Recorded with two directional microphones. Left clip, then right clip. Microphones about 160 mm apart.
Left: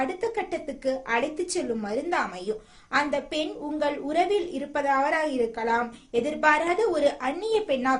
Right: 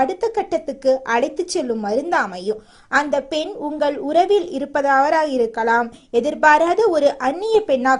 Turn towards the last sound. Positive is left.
turn(degrees=-40)  # may be behind; listen again after turning